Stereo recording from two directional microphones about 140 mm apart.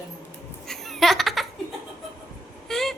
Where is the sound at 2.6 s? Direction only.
Centre (ahead or behind).